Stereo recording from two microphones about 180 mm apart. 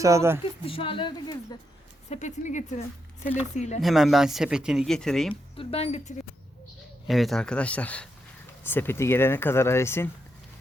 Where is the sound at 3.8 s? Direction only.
Centre (ahead or behind).